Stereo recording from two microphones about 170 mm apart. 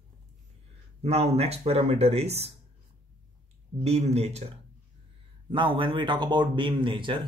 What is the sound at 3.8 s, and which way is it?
A man's voice, 40° right (ahead or behind).